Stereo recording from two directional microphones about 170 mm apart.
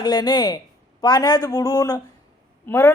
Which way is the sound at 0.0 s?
25° left (ahead or behind).